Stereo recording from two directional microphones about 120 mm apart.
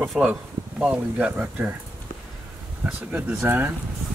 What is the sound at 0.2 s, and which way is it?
Speech, 5° right (ahead or behind).